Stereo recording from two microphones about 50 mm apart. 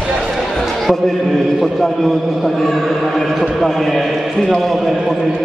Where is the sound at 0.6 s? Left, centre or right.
Centre.